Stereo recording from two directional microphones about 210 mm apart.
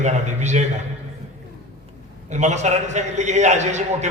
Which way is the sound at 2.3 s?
35° right (ahead or behind).